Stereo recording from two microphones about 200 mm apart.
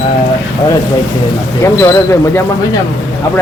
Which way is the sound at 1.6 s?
15° left (ahead or behind).